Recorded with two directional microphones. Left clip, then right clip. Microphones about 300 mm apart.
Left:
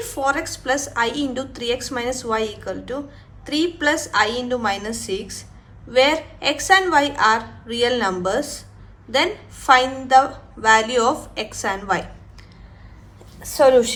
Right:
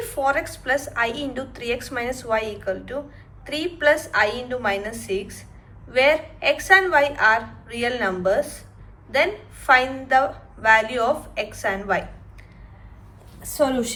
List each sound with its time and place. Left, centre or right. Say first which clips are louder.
0.2 s a woman's voice: even; centre
13.5 s a woman's voice: left 8 dB; left